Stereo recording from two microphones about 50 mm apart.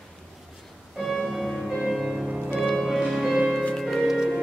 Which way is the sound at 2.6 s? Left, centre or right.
Centre.